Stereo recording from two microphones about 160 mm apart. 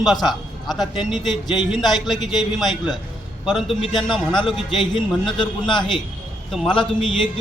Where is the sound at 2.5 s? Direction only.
Centre (ahead or behind).